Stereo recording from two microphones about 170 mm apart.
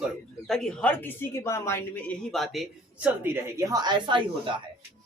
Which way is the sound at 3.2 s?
15° right (ahead or behind).